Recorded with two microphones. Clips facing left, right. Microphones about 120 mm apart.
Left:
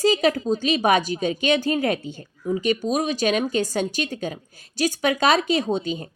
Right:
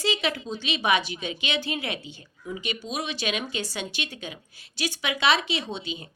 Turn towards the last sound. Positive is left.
turn(degrees=45)  # may be behind; listen again after turning